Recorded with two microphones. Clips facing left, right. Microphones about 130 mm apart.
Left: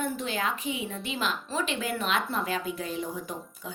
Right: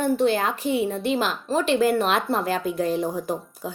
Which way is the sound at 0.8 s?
35° right (ahead or behind).